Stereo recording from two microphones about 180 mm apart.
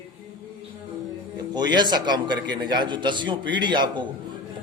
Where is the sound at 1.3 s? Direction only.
25° right (ahead or behind).